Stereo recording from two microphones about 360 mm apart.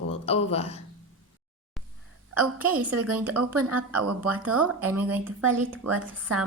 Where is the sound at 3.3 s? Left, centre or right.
Right.